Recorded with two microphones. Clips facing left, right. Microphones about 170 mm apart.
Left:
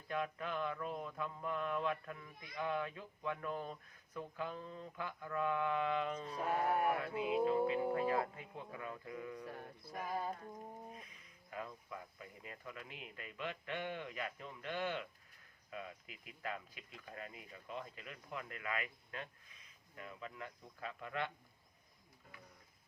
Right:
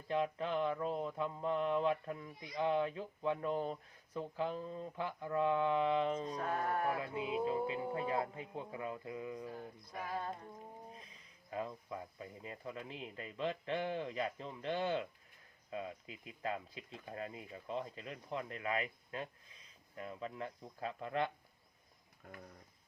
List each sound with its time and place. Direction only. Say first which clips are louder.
0.1 s speech: right 5 dB; 25° right (ahead or behind)
6.3 s sheep: left 1 dB; 5° left (ahead or behind)
7.1 s speech: left 2 dB; 25° right (ahead or behind)
10.1 s a sound: left 1 dB; 5° left (ahead or behind)
10.9 s speech: left 1 dB; 30° right (ahead or behind)
22.2 s speech: right 8 dB; 60° right (ahead or behind)